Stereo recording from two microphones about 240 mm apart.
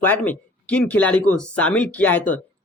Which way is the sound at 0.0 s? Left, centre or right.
Centre.